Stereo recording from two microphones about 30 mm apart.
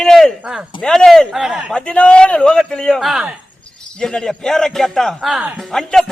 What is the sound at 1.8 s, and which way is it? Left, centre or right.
Speech, left.